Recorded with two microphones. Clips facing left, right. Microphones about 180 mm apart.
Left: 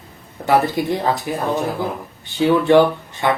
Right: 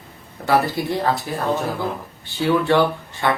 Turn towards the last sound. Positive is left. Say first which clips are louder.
# left 2 dB
turn(degrees=15)  # may be behind; listen again after turning